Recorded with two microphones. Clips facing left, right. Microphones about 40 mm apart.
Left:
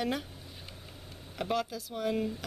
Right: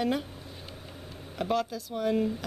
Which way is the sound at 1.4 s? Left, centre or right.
Centre.